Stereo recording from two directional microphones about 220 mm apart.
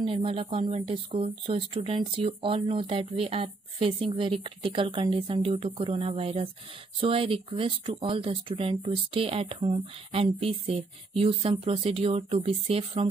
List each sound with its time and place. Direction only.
0.0 s speech: 25° right (ahead or behind)